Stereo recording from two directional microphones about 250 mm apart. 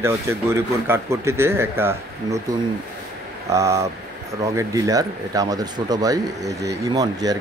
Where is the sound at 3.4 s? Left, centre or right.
Centre.